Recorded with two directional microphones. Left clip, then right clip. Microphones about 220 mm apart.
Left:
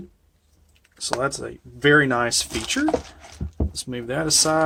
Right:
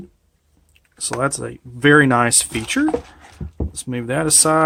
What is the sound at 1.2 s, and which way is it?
Speech, 30° right (ahead or behind).